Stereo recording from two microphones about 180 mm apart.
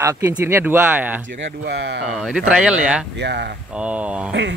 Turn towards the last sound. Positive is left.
turn(degrees=-5)  # may be behind; listen again after turning